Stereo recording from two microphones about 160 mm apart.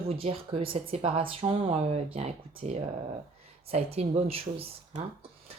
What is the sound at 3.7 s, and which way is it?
Speech, 40° right (ahead or behind).